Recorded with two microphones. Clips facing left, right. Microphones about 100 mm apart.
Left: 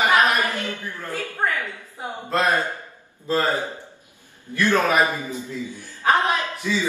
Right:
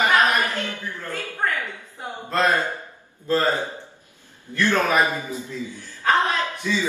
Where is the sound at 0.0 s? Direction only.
15° left (ahead or behind).